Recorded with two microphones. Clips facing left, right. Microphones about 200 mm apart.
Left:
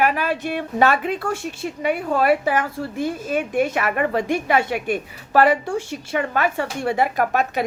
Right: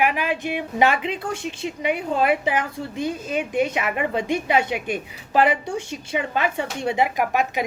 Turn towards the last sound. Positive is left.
turn(degrees=-10)  # may be behind; listen again after turning